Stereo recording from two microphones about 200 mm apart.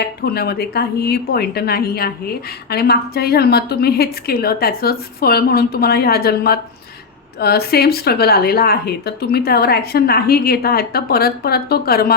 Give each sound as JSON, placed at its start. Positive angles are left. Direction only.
{"t": 0.0, "sound": "a woman's voice", "side_deg": 50}